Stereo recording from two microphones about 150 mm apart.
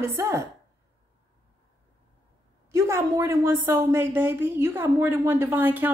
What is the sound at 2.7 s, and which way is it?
Speech, 20° right (ahead or behind).